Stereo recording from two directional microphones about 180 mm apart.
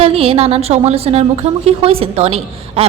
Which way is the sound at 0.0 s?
30° right (ahead or behind).